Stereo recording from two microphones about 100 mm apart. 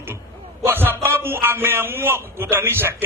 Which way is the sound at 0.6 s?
20° right (ahead or behind).